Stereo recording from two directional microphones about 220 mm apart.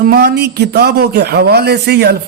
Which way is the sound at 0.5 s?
50° right (ahead or behind).